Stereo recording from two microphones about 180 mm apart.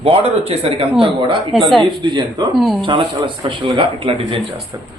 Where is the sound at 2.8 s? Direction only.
25° right (ahead or behind).